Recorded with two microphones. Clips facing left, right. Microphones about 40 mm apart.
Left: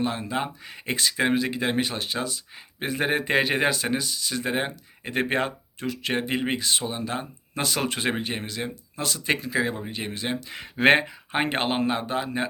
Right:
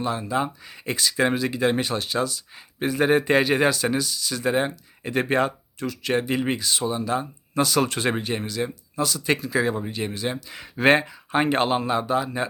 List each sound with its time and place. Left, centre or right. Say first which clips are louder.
0.0 s speech: right 2 dB; left
1.1 s speech: right 2 dB; centre
9.2 s speech: right 1 dB; centre